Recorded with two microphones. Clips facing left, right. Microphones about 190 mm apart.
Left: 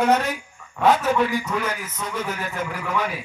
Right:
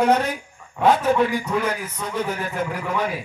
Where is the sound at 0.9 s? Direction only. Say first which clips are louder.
Right 2 dB; 30° right (ahead or behind).